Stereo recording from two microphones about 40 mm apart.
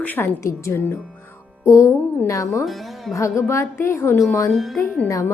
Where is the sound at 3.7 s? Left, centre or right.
Left.